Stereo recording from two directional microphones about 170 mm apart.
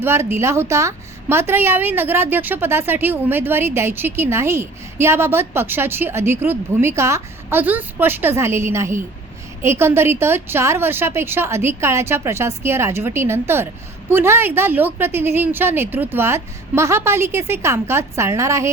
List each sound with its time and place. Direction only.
0.0 s a woman's voice: 15° right (ahead or behind)